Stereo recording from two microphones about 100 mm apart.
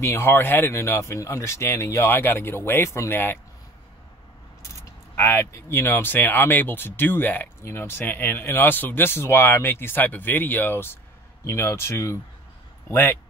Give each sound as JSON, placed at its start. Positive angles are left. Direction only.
{"t": 0.0, "sound": "speech", "side_deg": 25}
{"t": 4.6, "sound": "speech", "side_deg": 30}